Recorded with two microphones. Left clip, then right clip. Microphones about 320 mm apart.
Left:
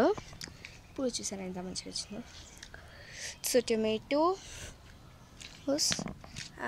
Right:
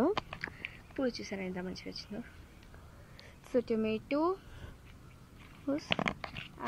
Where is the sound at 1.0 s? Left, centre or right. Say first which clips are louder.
Even; centre.